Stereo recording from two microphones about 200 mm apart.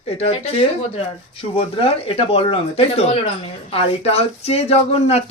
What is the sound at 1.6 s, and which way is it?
Speech, 30° left (ahead or behind).